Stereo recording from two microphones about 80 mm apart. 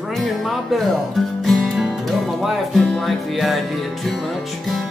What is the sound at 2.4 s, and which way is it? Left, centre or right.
Music, centre.